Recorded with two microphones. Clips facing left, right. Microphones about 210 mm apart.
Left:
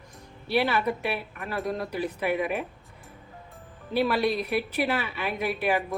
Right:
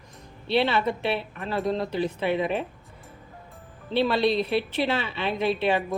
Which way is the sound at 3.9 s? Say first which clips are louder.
Right 2 dB; 25° right (ahead or behind).